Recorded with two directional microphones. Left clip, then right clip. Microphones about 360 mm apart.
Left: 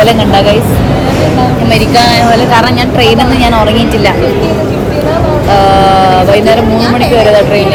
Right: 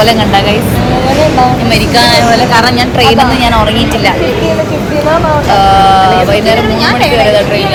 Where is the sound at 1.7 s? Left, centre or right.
Centre.